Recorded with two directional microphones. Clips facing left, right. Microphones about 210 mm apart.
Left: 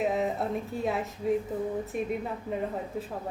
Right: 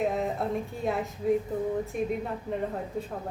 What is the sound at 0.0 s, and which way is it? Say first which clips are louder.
A woman's voice: even; centre (ahead or behind).